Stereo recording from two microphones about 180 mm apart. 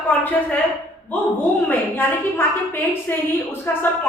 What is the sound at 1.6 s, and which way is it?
Speech, 10° left (ahead or behind).